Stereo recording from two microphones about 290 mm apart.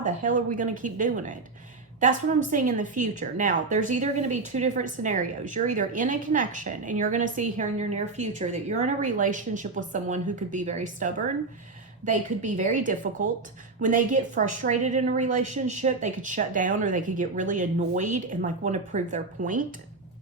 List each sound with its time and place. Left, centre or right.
0.0 s a woman's voice: right
2.5 s a woman's voice: right